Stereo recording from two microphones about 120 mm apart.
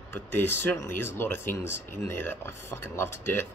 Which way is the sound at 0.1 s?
20° left (ahead or behind).